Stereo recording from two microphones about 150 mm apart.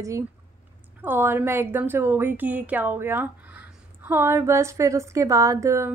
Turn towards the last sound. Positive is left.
turn(degrees=-20)  # may be behind; listen again after turning